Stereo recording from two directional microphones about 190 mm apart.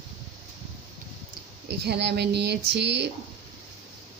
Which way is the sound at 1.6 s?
60° right (ahead or behind).